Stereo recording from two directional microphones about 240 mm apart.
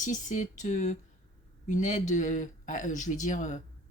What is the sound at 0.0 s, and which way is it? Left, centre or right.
Speech, left.